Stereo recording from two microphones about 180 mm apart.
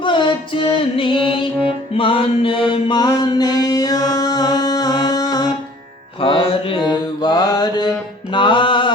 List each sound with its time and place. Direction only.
0.0 s music: 25° left (ahead or behind)
6.1 s mantra: 30° left (ahead or behind)